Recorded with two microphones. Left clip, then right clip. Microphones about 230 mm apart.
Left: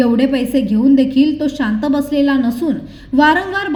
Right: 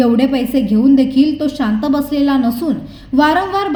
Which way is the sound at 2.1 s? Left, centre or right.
Centre.